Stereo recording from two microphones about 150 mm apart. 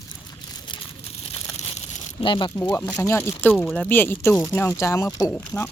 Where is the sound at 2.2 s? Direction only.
30° left (ahead or behind).